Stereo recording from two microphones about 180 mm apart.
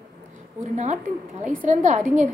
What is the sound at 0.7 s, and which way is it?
A woman's voice, 40° right (ahead or behind).